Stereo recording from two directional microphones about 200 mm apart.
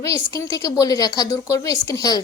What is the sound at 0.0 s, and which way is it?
A woman's voice, 15° left (ahead or behind).